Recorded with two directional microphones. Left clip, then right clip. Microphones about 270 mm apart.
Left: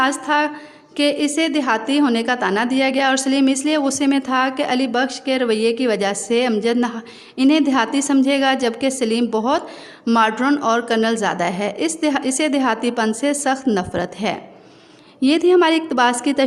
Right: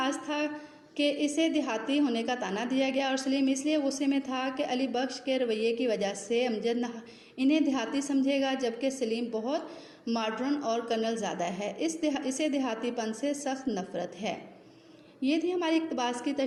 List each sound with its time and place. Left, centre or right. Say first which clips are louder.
0.0 s a woman's voice: left 14 dB; left
15.4 s a woman's voice: left 15 dB; left